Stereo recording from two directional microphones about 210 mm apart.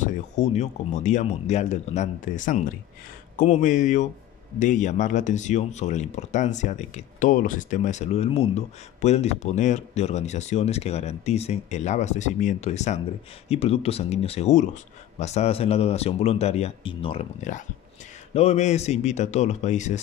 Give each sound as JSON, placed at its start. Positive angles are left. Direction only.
{"t": 0.0, "sound": "speech", "side_deg": 35}